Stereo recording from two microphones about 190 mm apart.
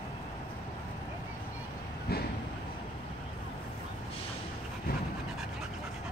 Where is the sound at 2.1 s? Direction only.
55° left (ahead or behind).